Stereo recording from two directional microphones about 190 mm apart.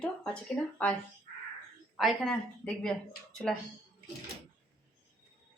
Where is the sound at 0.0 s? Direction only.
5° left (ahead or behind).